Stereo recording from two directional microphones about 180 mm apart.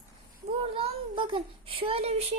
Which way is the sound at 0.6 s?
30° right (ahead or behind).